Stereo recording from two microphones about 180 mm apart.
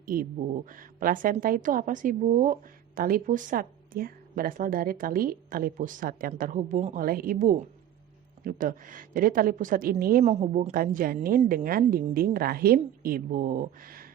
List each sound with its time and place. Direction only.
0.0 s a woman's voice: 50° right (ahead or behind)
10.2 s a woman's voice: 35° right (ahead or behind); by 14.1 s 55° right (ahead or behind)